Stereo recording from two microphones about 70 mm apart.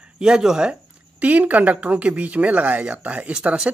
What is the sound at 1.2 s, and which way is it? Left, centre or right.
Speech, right.